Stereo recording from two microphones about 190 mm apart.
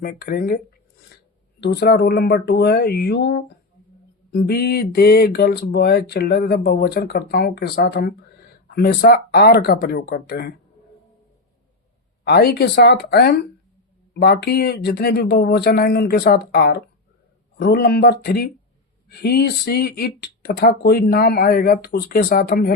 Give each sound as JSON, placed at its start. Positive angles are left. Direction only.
{"t": 0.0, "sound": "speech", "side_deg": 50}
{"t": 1.6, "sound": "speech", "side_deg": 60}
{"t": 12.2, "sound": "speech", "side_deg": 55}